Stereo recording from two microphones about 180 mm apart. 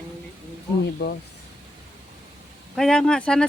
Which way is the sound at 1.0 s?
65° left (ahead or behind).